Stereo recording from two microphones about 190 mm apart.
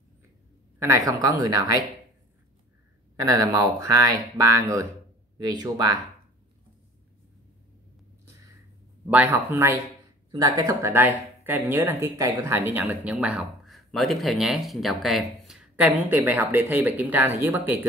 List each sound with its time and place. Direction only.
0.7 s speech: 15° right (ahead or behind)
3.2 s speech: 15° right (ahead or behind)
9.1 s speech: 10° right (ahead or behind)